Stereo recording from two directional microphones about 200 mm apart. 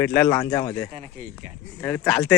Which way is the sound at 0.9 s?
35° right (ahead or behind).